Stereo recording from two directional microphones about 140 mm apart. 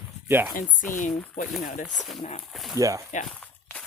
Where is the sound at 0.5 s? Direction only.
70° left (ahead or behind).